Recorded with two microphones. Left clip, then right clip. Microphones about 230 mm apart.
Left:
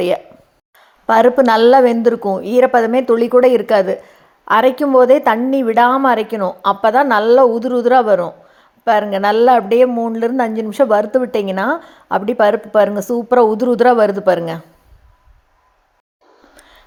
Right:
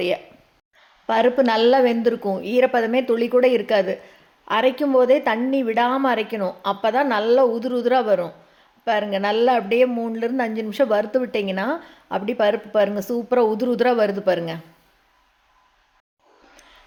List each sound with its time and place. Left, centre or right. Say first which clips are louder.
1.0 s a woman's voice: left 7 dB; centre